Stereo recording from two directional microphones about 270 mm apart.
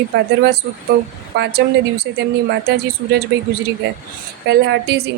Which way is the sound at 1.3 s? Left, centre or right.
Right.